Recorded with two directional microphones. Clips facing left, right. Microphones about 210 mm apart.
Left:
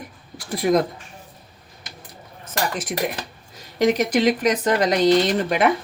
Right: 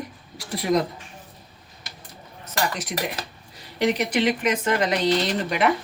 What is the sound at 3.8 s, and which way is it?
Speech, 45° left (ahead or behind).